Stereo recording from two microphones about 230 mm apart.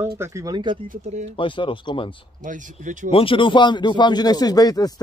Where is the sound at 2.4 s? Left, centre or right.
Right.